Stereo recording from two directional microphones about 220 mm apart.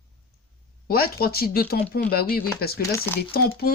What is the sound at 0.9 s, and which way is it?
Music, 45° left (ahead or behind).